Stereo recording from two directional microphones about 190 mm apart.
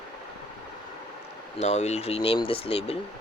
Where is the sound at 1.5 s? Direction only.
35° left (ahead or behind).